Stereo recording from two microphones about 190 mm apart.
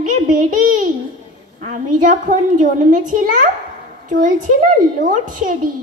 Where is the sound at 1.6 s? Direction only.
45° right (ahead or behind).